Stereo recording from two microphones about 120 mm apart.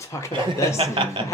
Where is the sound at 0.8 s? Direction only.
45° right (ahead or behind).